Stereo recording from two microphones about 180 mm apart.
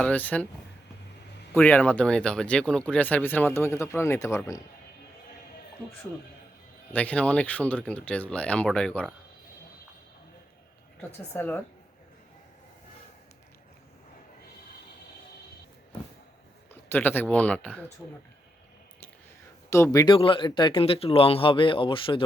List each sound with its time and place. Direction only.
0.0 s speech: 10° left (ahead or behind)
1.5 s speech: 10° left (ahead or behind)
6.9 s speech: 10° left (ahead or behind)
11.3 s speech: 10° left (ahead or behind)
16.9 s speech: 10° left (ahead or behind)
19.7 s speech: 15° left (ahead or behind)
20.1 s speech: 30° left (ahead or behind)